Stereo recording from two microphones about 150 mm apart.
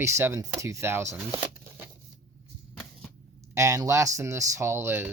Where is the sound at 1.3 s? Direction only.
15° right (ahead or behind).